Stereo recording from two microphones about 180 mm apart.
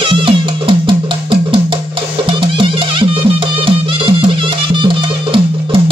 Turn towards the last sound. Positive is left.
turn(degrees=-30)  # may be behind; listen again after turning